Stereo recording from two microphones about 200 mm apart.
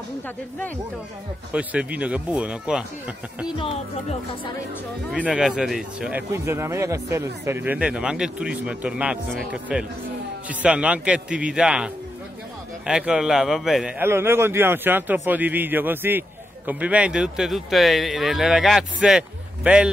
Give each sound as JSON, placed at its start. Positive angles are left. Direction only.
{"t": 1.5, "sound": "speech", "side_deg": -5}
{"t": 3.5, "sound": "speech", "side_deg": 30}
{"t": 5.1, "sound": "a man's voice", "side_deg": -5}